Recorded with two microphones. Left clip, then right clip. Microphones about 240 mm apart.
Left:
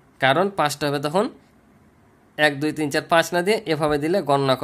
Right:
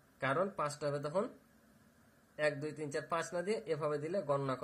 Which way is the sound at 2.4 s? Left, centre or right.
Left.